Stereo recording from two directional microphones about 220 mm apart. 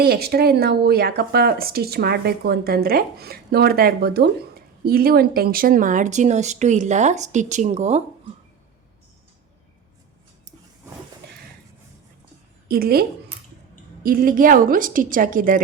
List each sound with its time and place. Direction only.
0.0 s speech: 45° right (ahead or behind)
12.6 s a woman's voice: 45° right (ahead or behind)